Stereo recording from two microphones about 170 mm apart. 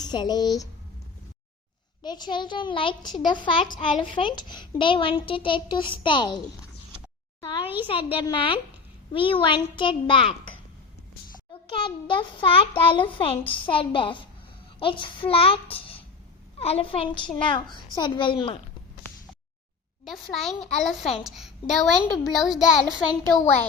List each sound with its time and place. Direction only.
0.0 s a child's voice: 25° left (ahead or behind)
2.0 s a child's voice: 25° left (ahead or behind)
7.6 s a child's voice: 10° right (ahead or behind)
7.9 s a child's voice: 30° left (ahead or behind)
11.8 s a child's voice: 30° left (ahead or behind)
20.1 s a woman's voice: centre (ahead or behind)